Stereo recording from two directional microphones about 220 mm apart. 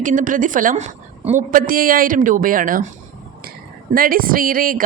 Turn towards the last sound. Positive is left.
turn(degrees=-40)  # may be behind; listen again after turning